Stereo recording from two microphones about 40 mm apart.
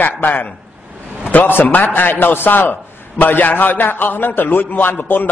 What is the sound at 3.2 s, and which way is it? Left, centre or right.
A man's voice, left.